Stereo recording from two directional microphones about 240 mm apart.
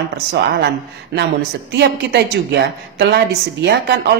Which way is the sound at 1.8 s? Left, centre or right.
Right.